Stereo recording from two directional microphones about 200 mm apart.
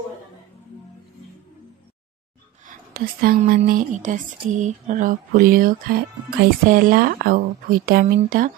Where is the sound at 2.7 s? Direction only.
45° right (ahead or behind).